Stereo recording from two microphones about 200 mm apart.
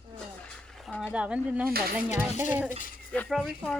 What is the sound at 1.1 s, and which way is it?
Speech, 5° right (ahead or behind).